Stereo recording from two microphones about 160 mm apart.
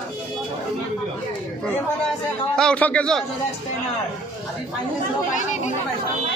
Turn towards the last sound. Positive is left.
turn(degrees=45)  # may be behind; listen again after turning